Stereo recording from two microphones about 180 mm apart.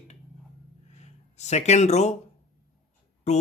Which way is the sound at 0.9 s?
40° left (ahead or behind).